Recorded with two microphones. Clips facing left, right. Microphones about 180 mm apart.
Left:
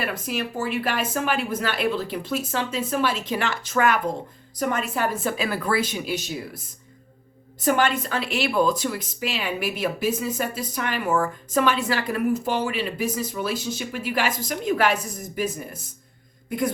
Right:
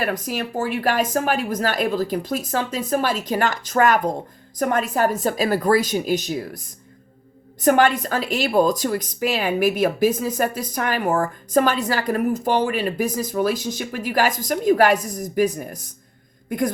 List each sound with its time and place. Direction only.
0.0 s speech: 45° right (ahead or behind)
7.6 s speech: 50° right (ahead or behind)
16.5 s a sound: 45° right (ahead or behind)